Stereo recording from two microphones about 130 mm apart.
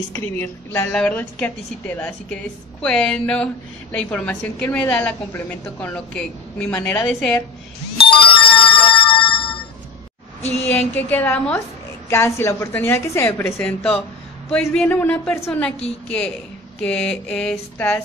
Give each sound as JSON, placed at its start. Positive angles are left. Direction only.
{"t": 0.1, "sound": "a woman's voice", "side_deg": 20}
{"t": 8.1, "sound": "music", "side_deg": 40}
{"t": 10.7, "sound": "a woman's voice", "side_deg": 15}
{"t": 16.8, "sound": "a woman's voice", "side_deg": 10}